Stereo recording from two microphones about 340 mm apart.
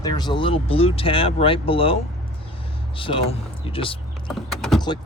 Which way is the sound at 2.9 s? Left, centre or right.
Centre.